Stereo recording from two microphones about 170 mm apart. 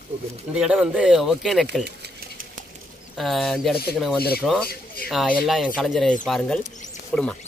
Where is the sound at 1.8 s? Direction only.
75° right (ahead or behind).